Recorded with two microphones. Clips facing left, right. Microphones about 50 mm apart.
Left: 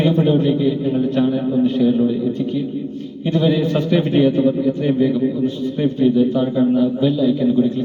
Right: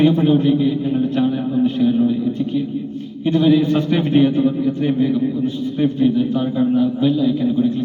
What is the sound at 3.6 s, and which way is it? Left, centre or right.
Speech, right.